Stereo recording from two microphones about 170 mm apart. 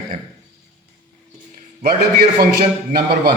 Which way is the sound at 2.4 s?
70° right (ahead or behind).